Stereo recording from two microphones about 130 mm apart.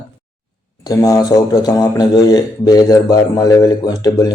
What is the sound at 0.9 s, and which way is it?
Speech, 30° left (ahead or behind).